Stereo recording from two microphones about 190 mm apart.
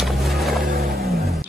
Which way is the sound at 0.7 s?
55° right (ahead or behind).